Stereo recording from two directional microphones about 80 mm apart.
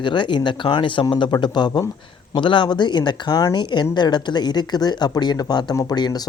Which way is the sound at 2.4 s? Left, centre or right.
Left.